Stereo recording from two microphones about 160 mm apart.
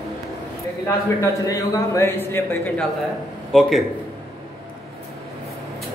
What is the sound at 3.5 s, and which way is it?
Speech, centre (ahead or behind).